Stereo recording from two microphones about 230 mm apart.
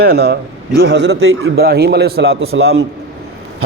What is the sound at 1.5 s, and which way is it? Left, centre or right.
Speech, right.